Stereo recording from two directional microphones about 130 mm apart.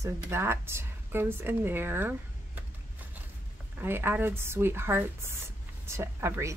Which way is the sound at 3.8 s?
15° right (ahead or behind).